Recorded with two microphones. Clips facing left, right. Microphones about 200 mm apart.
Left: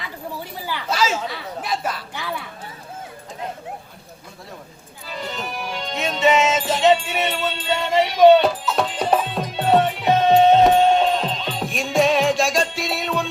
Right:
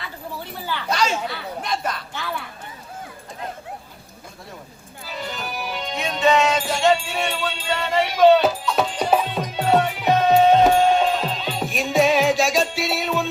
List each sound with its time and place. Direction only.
0.7 s chatter: 5° left (ahead or behind)
1.6 s a sound: 5° left (ahead or behind)
5.0 s music: centre (ahead or behind)
6.0 s music: 25° left (ahead or behind)
6.9 s music: centre (ahead or behind)